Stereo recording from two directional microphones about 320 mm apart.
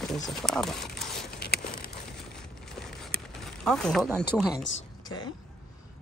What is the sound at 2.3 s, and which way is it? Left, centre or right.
Mechanisms, centre.